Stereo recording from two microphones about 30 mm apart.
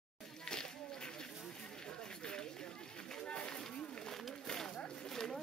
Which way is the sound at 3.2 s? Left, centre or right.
Left.